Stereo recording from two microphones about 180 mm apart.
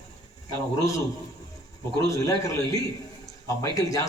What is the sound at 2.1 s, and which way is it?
A man's voice, 20° left (ahead or behind).